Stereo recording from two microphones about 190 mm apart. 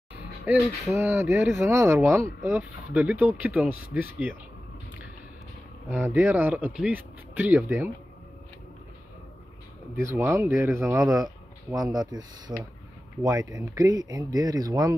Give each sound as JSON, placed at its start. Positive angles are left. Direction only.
{"t": 0.5, "sound": "a sound", "side_deg": 0}
{"t": 0.9, "sound": "speech", "side_deg": -15}
{"t": 5.9, "sound": "speech", "side_deg": -10}
{"t": 9.9, "sound": "speech", "side_deg": -10}